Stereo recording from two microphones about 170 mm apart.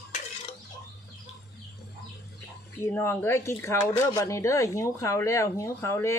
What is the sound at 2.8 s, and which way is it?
Speech, 15° left (ahead or behind).